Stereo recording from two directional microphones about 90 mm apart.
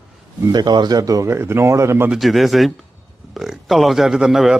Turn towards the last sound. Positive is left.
turn(degrees=-5)  # may be behind; listen again after turning